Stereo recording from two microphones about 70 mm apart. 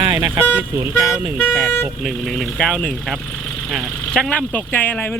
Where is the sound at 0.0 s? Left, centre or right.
Right.